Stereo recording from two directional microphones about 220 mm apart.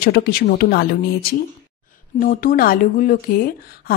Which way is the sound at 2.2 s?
40° left (ahead or behind).